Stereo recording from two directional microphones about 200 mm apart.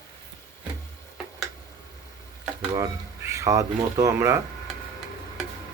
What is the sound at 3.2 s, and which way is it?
Speech, 15° right (ahead or behind).